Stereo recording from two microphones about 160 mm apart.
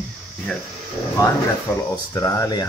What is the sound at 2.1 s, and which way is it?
Speech, 20° left (ahead or behind).